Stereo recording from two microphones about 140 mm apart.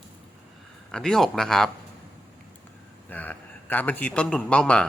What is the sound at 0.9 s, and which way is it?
Speech, 5° left (ahead or behind).